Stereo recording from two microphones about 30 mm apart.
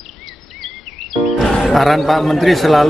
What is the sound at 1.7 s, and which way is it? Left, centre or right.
A man's voice, centre.